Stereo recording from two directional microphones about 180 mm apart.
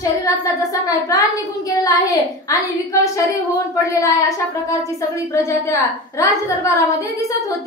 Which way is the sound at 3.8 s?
15° left (ahead or behind).